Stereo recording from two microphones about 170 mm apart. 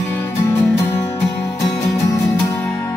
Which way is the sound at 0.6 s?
10° left (ahead or behind).